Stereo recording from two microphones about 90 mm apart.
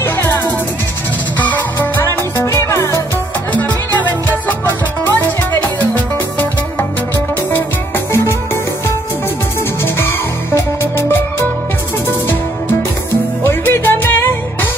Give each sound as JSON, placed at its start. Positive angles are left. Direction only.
{"t": 0.0, "sound": "music", "side_deg": 25}
{"t": 1.4, "sound": "music", "side_deg": 20}
{"t": 2.3, "sound": "music", "side_deg": 35}
{"t": 3.6, "sound": "music", "side_deg": 20}
{"t": 9.9, "sound": "music", "side_deg": 25}
{"t": 13.4, "sound": "music", "side_deg": 25}